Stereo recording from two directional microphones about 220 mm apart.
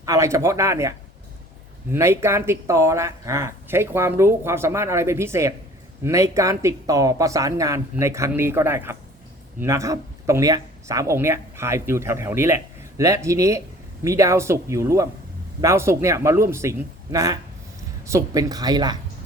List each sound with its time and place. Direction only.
0.0 s speech: 15° right (ahead or behind)